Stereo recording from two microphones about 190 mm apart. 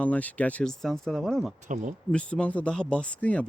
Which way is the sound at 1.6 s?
40° right (ahead or behind).